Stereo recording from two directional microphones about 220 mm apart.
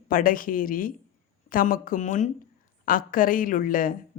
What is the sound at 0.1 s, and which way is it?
Speech, 40° left (ahead or behind).